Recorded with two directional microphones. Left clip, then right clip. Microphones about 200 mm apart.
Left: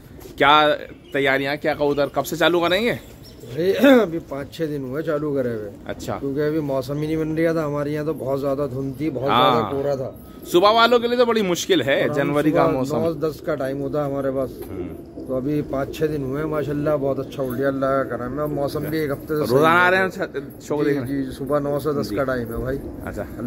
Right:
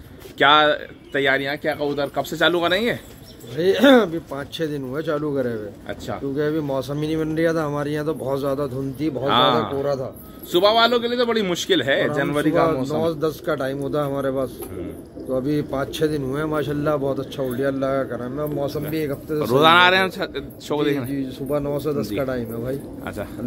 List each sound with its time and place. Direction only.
0.4 s speech: 5° left (ahead or behind)
3.5 s speech: 10° right (ahead or behind)
5.9 s speech: 15° left (ahead or behind)
6.3 s speech: 5° right (ahead or behind)
9.3 s speech: 5° left (ahead or behind)
13.0 s a man's voice: 20° right (ahead or behind)
19.5 s a man's voice: centre (ahead or behind)
21.5 s a man's voice: 20° right (ahead or behind)